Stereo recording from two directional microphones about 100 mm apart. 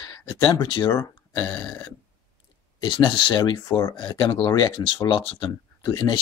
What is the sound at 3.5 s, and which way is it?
Speech, 30° left (ahead or behind).